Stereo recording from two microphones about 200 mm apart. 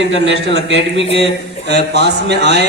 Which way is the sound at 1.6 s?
55° right (ahead or behind).